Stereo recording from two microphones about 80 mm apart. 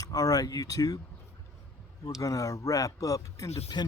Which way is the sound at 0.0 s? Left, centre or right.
Left.